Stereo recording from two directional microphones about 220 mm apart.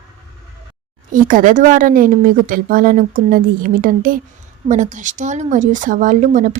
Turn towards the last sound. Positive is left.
turn(degrees=-35)  # may be behind; listen again after turning